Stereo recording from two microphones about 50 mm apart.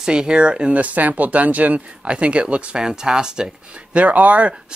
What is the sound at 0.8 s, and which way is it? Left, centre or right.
Speech, right.